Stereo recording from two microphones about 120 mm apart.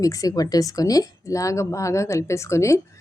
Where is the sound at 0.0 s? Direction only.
30° left (ahead or behind).